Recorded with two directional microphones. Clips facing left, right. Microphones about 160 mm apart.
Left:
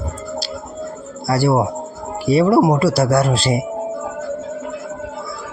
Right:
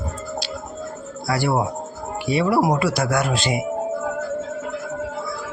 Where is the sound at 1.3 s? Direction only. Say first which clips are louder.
Left 5 dB; 35° left (ahead or behind).